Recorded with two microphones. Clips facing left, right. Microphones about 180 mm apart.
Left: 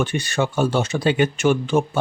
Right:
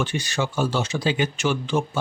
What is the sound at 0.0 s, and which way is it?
Speech, 55° left (ahead or behind).